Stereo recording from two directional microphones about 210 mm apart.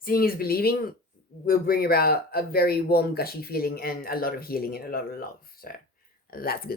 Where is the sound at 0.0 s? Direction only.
45° left (ahead or behind).